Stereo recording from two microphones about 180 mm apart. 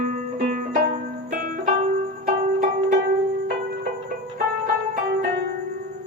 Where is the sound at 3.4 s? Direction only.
60° right (ahead or behind).